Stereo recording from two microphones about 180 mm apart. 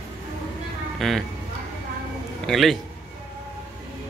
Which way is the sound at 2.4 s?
Centre (ahead or behind).